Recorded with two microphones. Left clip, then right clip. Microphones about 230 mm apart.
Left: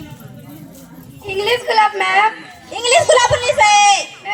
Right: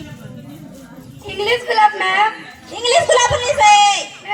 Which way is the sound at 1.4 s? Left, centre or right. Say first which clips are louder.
Right 1 dB; left.